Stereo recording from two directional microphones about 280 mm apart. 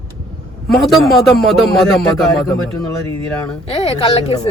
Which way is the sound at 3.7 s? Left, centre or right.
Left.